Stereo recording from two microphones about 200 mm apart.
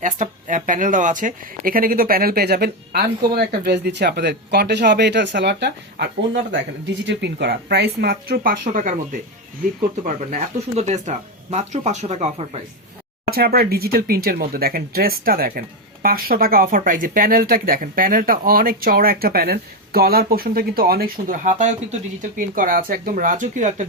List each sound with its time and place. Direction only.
0.0 s speech: 40° right (ahead or behind)
13.2 s speech: 50° right (ahead or behind)